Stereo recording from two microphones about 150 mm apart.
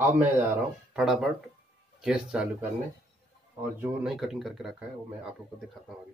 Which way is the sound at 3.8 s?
5° right (ahead or behind).